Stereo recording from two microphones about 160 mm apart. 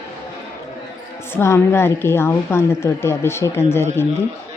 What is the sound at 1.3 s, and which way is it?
A woman's voice, 15° left (ahead or behind).